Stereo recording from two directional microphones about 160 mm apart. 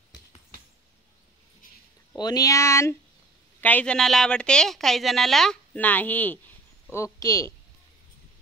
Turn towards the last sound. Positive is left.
turn(degrees=20)  # may be behind; listen again after turning